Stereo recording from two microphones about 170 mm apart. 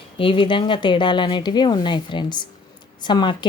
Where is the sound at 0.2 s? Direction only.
30° left (ahead or behind).